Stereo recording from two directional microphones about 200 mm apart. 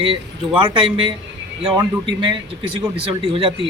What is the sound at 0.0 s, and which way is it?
A man's voice, 25° right (ahead or behind).